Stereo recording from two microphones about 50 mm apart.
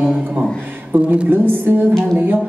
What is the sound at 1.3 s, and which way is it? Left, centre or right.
A woman's voice, right.